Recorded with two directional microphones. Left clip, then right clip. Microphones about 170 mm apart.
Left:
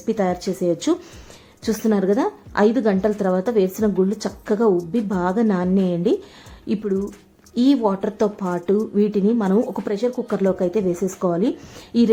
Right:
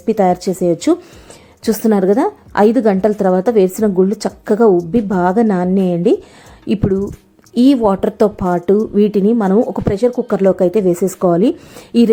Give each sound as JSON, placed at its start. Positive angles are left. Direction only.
{"t": 0.0, "sound": "speech", "side_deg": -25}